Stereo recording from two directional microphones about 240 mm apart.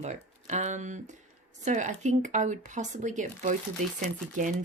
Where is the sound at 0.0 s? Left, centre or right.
Right.